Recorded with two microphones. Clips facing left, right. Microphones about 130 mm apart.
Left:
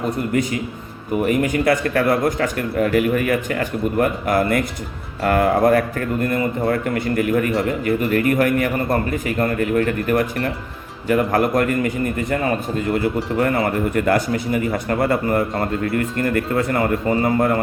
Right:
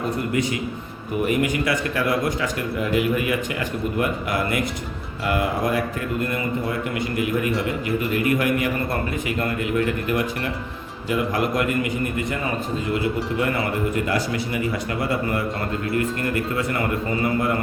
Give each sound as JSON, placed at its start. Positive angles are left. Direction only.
{"t": 1.3, "sound": "speech", "side_deg": 45}
{"t": 13.9, "sound": "speech", "side_deg": 55}